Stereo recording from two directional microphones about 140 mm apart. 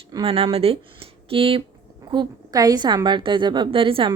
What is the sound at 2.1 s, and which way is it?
Speech, 30° right (ahead or behind).